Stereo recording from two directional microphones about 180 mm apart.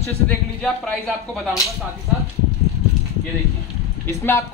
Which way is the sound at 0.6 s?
Centre (ahead or behind).